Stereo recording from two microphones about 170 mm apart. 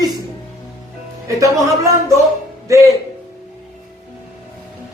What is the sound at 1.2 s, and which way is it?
Speech, 20° right (ahead or behind).